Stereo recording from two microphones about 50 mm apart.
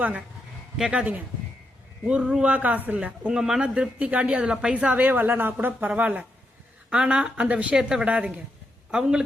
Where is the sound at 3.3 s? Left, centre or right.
Centre; by 5.8 s right.